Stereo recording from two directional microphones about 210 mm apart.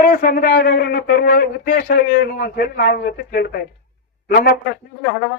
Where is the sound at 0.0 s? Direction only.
45° left (ahead or behind).